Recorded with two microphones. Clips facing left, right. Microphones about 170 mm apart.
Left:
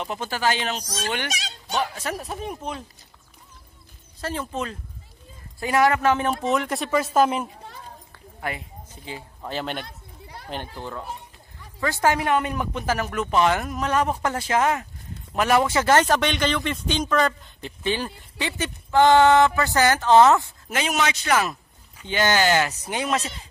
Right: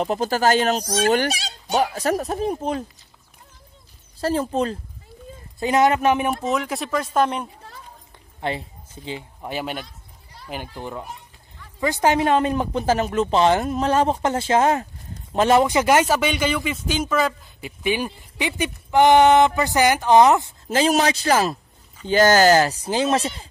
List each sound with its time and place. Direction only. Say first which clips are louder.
0.0 s speech: right 6 dB; 40° right (ahead or behind)
0.8 s a child's voice: right 10 dB; 55° right (ahead or behind)
1.1 s speech: right 9 dB; 35° right (ahead or behind)
4.2 s speech: right 7 dB; 35° right (ahead or behind)
5.6 s speech: right 2 dB; 20° right (ahead or behind)
6.4 s speech: even; centre (ahead or behind)
8.4 s speech: right 5 dB; 25° right (ahead or behind)
9.4 s speech: even; 10° right (ahead or behind)
9.8 s a sound: left 6 dB; 65° left (ahead or behind)
10.5 s speech: right 2 dB; 10° right (ahead or behind)
20.7 s speech: right 6 dB; 35° right (ahead or behind)